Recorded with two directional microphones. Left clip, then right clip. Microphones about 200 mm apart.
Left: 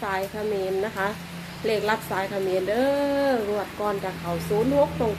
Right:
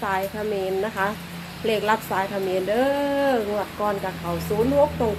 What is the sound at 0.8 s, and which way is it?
Speech, 10° left (ahead or behind).